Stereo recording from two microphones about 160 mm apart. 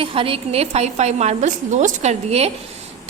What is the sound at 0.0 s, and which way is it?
A woman's voice, 35° right (ahead or behind).